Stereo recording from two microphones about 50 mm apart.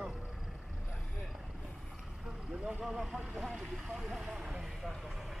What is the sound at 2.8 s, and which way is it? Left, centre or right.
Speech, centre.